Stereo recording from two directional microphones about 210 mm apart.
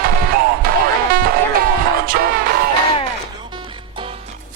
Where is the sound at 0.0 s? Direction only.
45° right (ahead or behind).